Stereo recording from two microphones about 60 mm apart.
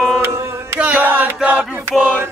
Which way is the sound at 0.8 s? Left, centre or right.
Right.